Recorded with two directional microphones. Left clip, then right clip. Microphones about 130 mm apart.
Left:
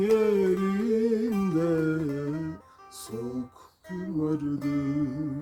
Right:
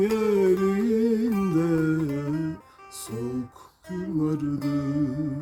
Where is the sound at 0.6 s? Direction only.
40° right (ahead or behind).